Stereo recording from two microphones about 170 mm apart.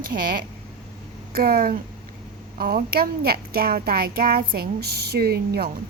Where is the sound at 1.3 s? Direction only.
60° right (ahead or behind).